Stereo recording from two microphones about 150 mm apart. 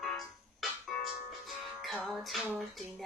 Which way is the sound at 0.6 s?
Centre (ahead or behind).